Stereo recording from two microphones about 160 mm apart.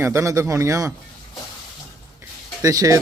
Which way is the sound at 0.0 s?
20° right (ahead or behind).